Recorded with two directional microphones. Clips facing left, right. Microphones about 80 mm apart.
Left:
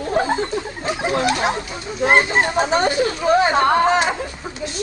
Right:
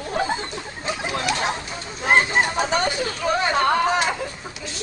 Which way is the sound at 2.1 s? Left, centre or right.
Left.